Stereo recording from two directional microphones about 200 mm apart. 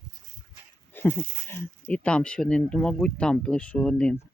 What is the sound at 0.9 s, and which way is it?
Speech, 10° left (ahead or behind).